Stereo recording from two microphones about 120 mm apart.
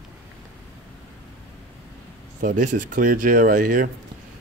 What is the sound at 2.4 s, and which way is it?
Speech, 90° right.